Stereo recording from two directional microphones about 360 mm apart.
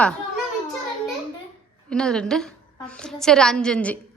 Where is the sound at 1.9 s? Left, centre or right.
Centre.